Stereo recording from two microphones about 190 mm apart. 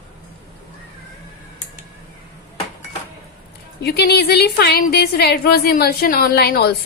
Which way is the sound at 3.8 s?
60° left (ahead or behind).